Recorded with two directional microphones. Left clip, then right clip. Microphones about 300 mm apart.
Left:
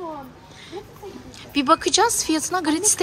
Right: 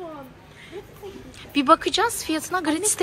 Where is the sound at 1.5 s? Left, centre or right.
Centre.